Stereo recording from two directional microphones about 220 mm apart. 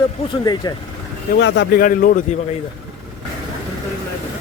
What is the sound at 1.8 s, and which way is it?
Speech, 40° left (ahead or behind).